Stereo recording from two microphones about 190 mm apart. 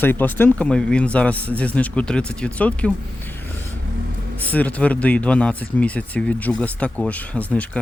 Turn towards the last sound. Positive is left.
turn(degrees=5)  # may be behind; listen again after turning